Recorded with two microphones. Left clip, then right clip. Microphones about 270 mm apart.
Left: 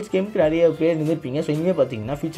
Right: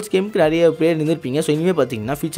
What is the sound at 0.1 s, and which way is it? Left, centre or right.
Speech, right.